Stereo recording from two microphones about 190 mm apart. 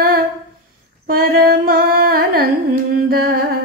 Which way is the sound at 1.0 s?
50° right (ahead or behind).